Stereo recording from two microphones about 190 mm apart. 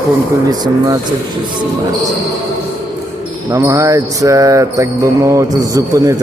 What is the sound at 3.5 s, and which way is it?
Music, 15° right (ahead or behind).